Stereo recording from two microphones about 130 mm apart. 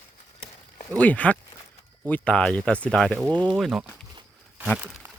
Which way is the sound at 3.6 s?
5° right (ahead or behind).